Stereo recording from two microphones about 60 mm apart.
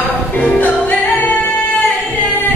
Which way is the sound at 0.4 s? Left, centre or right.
Left.